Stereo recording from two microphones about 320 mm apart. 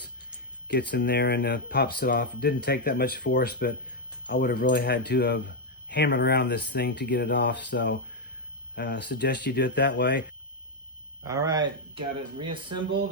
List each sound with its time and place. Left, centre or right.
0.7 s speech: left
11.3 s speech: centre